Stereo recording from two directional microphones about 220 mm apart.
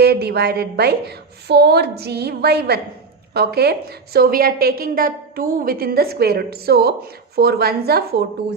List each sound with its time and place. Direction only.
0.0 s a woman's voice: 45° right (ahead or behind)